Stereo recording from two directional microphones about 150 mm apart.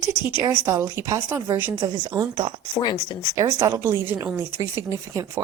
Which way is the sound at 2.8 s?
30° left (ahead or behind).